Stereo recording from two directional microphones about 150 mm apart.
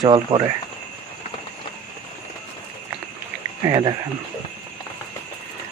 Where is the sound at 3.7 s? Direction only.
30° right (ahead or behind).